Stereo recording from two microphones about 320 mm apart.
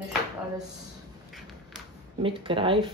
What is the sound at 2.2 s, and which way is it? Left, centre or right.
Speech, centre.